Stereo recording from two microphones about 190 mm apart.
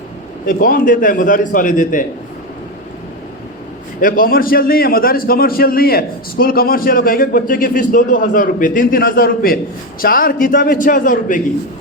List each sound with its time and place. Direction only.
0.4 s a man's voice: 45° left (ahead or behind)
4.0 s a man's voice: 50° left (ahead or behind)